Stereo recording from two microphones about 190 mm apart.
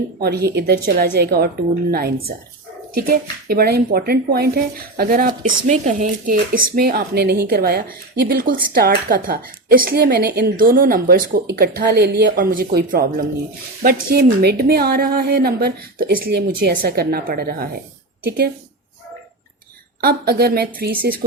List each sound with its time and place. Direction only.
0.2 s a woman's voice: 60° right (ahead or behind)
20.0 s speech: 55° right (ahead or behind)